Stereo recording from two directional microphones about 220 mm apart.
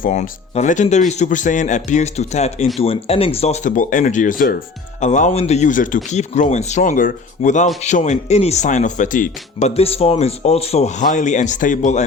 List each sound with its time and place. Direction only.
0.0 s speech: 30° left (ahead or behind)